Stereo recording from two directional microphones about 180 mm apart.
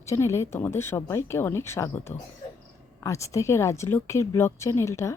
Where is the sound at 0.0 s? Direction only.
15° left (ahead or behind).